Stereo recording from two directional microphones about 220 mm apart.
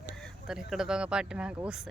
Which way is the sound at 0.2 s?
Centre (ahead or behind).